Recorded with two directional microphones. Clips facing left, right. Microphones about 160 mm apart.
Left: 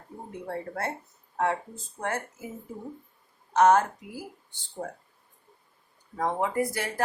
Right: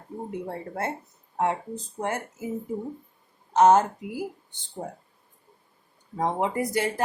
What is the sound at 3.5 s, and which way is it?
Speech, 25° right (ahead or behind).